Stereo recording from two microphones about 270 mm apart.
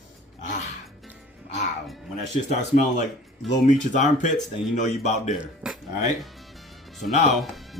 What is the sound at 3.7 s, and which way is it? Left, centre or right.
Speech, left.